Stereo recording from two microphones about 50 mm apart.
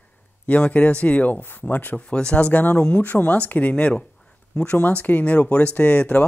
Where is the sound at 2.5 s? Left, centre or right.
Left.